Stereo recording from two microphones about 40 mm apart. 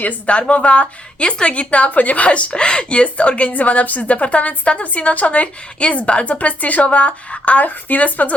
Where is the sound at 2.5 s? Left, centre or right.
Left.